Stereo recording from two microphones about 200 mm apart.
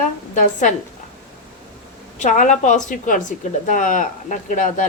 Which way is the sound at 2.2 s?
40° left (ahead or behind).